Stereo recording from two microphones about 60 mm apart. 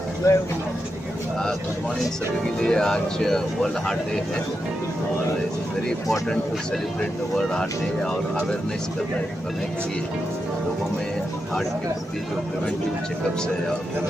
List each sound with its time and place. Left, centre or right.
0.2 s speech: left
2.6 s speech: centre
7.3 s speech: centre